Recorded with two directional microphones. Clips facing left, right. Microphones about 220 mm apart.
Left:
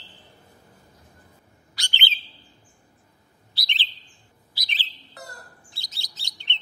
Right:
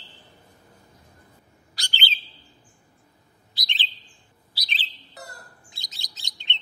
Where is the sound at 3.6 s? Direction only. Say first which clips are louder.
Even; 15° right (ahead or behind).